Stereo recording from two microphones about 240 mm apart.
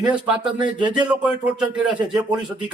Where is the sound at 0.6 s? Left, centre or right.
Centre.